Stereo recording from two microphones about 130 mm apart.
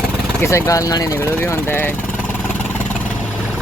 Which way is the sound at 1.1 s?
15° left (ahead or behind).